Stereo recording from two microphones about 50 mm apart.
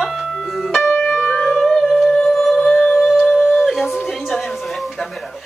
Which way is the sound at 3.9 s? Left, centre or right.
Centre.